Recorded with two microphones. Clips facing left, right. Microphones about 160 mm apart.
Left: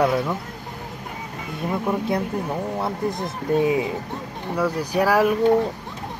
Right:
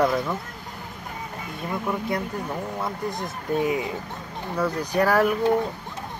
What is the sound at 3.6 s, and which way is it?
Speech, 20° left (ahead or behind).